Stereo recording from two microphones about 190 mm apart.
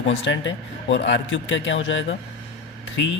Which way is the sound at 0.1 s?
75° left (ahead or behind).